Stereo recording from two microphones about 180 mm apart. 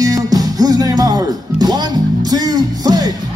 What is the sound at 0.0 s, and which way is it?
Music, 20° right (ahead or behind).